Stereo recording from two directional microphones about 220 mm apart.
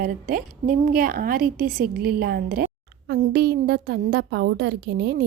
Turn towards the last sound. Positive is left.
turn(degrees=-50)  # may be behind; listen again after turning